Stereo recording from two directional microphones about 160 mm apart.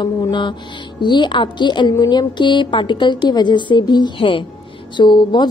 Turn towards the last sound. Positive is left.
turn(degrees=30)  # may be behind; listen again after turning